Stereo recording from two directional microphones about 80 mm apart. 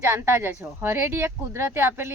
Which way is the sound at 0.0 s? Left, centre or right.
Right.